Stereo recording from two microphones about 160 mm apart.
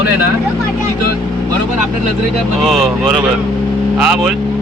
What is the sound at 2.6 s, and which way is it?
Speech, centre (ahead or behind).